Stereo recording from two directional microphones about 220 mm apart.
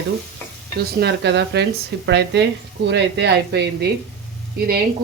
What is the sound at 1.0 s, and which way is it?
Speech, 50° right (ahead or behind).